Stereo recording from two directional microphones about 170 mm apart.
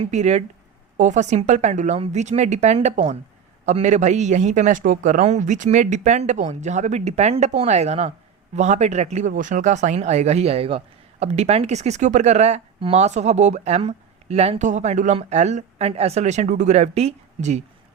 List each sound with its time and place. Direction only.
0.0 s speech: 40° right (ahead or behind)